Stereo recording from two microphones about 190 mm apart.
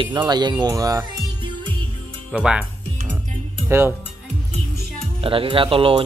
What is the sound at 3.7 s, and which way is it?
Speech, 10° right (ahead or behind).